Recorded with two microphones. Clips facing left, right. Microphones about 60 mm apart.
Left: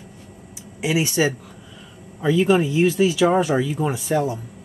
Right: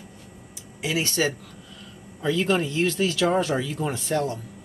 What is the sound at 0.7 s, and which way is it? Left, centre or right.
Speech, centre.